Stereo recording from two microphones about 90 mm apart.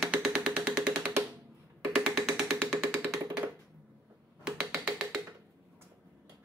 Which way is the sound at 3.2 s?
35° right (ahead or behind).